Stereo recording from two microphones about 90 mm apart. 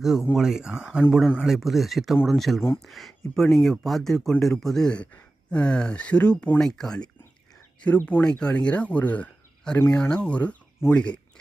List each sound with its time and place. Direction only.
0.0 s speech: 5° right (ahead or behind); by 10.6 s 15° left (ahead or behind)
10.8 s speech: 30° left (ahead or behind)